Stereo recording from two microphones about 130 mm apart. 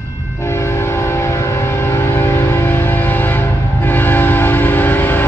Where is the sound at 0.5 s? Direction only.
20° left (ahead or behind).